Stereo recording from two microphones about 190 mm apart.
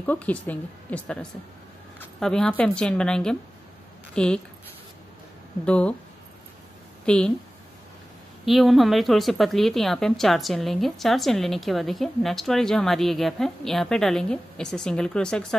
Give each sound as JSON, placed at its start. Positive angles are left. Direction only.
{"t": 0.0, "sound": "a woman's voice", "side_deg": 10}
{"t": 5.7, "sound": "a woman's voice", "side_deg": 5}
{"t": 7.1, "sound": "speech", "side_deg": 5}
{"t": 8.5, "sound": "speech", "side_deg": 0}